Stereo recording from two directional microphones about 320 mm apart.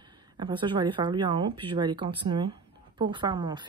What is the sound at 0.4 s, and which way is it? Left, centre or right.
Speech, centre.